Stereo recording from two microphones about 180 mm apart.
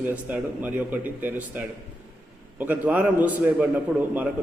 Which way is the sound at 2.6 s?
10° right (ahead or behind).